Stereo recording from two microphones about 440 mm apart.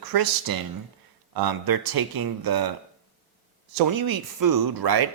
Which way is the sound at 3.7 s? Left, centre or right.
Right.